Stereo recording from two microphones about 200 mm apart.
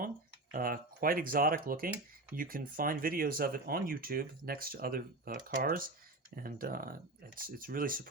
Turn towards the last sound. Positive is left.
turn(degrees=-45)  # may be behind; listen again after turning